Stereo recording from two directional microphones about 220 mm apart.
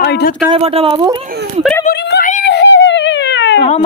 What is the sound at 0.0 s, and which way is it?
Speech, 45° left (ahead or behind).